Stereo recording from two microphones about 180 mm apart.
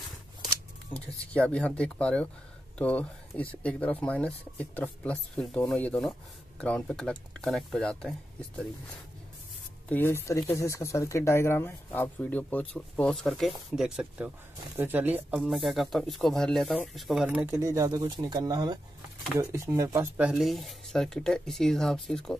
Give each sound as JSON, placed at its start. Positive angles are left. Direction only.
{"t": 0.9, "sound": "speech", "side_deg": 10}
{"t": 9.8, "sound": "speech", "side_deg": 10}
{"t": 17.5, "sound": "speech", "side_deg": -15}